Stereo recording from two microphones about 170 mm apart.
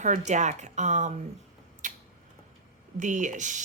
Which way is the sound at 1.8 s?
45° right (ahead or behind).